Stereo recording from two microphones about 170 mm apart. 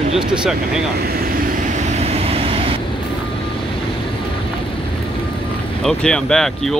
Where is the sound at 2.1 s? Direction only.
35° right (ahead or behind).